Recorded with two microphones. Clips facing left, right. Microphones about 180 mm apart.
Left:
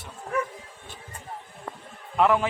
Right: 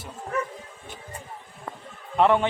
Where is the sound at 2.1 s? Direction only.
Centre (ahead or behind).